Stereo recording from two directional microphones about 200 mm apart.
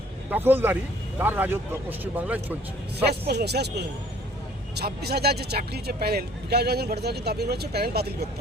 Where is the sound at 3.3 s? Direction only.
55° right (ahead or behind).